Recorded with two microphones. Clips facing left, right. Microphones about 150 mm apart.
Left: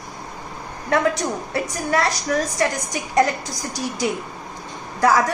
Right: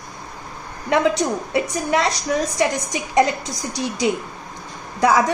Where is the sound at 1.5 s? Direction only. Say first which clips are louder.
Right 2 dB; 20° right (ahead or behind).